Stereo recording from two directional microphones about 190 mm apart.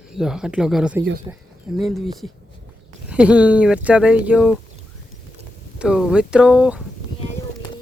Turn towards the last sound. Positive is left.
turn(degrees=-5)  # may be behind; listen again after turning